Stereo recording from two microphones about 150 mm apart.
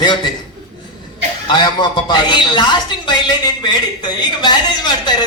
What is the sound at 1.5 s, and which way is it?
A man's voice, 30° left (ahead or behind).